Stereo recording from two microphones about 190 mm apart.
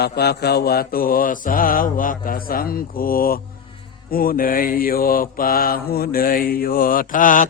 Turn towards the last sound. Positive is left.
turn(degrees=45)  # may be behind; listen again after turning